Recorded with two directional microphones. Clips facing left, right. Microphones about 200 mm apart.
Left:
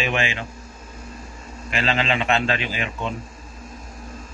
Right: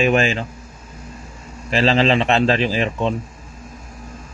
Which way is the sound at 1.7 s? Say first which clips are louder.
Right 7 dB; 35° right (ahead or behind).